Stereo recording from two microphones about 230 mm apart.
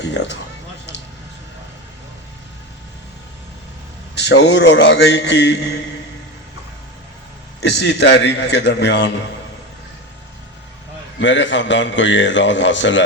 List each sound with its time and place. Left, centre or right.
0.0 s a man's voice: left
4.1 s a man's voice: left
7.6 s a man's voice: left
11.2 s a man's voice: left